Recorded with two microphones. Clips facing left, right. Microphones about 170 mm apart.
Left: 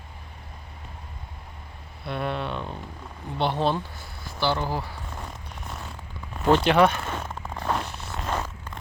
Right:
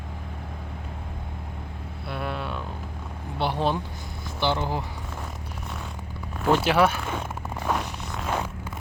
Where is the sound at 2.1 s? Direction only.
5° right (ahead or behind).